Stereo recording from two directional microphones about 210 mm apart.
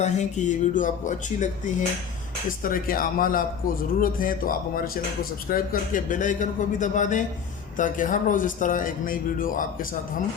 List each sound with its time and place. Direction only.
0.0 s a man's voice: 35° left (ahead or behind)